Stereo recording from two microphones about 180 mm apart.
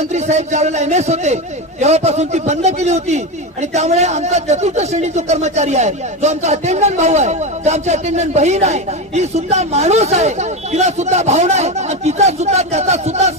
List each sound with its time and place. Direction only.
0.1 s a man's voice: 40° right (ahead or behind)